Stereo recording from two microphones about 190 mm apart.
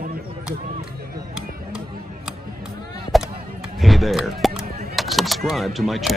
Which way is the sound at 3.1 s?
Centre (ahead or behind).